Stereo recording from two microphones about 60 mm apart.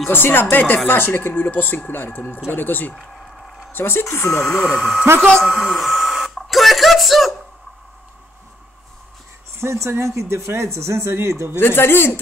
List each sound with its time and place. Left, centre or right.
0.1 s speech: left
4.0 s speech: left
4.5 s speech: centre
9.6 s speech: right
11.5 s speech: left